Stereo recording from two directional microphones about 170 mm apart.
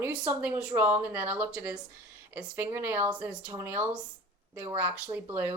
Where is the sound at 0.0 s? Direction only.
10° right (ahead or behind).